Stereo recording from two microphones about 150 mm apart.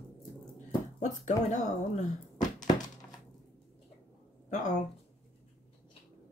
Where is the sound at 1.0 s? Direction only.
55° left (ahead or behind).